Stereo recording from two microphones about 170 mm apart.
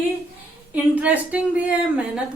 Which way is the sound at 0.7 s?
10° right (ahead or behind).